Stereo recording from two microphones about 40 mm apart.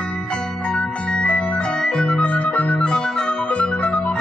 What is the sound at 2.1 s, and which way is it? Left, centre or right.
Music, left.